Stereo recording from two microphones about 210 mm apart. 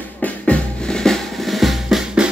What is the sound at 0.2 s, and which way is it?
Drum, 5° left (ahead or behind).